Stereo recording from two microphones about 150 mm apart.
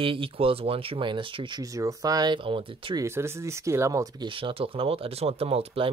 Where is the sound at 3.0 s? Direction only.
15° right (ahead or behind).